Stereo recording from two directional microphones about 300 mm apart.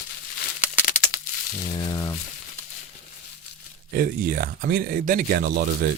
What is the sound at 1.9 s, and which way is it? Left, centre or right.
Crumpling, centre.